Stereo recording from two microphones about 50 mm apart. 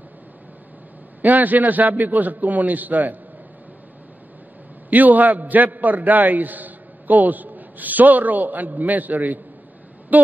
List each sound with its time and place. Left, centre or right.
1.2 s a man's voice: right
4.8 s a man's voice: right